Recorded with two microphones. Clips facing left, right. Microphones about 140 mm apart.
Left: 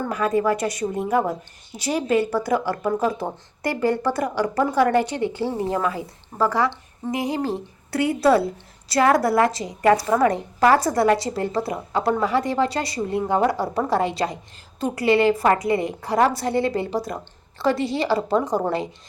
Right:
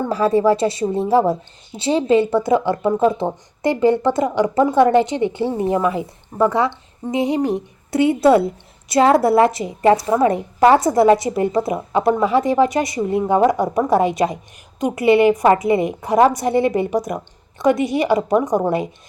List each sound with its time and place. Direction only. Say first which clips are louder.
0.0 s a woman's voice: right 5 dB; 30° right (ahead or behind)